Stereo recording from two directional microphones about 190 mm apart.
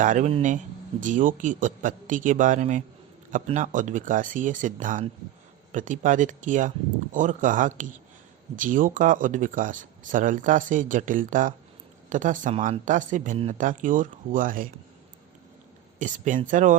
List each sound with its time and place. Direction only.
0.0 s speech: 40° right (ahead or behind)
16.0 s speech: 40° right (ahead or behind)